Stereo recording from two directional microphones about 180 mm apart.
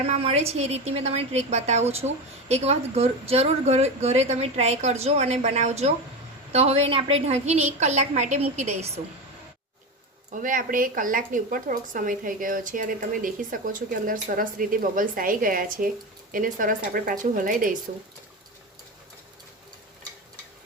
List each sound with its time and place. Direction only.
0.0 s a woman's voice: 35° right (ahead or behind)
10.3 s a woman's voice: 50° right (ahead or behind)